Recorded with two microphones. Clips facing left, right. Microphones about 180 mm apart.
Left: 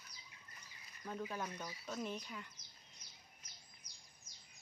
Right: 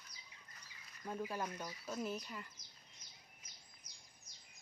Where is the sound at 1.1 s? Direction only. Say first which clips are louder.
Right 2 dB; 10° right (ahead or behind).